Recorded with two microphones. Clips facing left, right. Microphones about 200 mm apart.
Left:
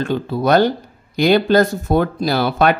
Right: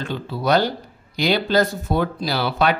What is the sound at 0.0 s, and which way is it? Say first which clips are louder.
Speech: left 6 dB; 50° left (ahead or behind).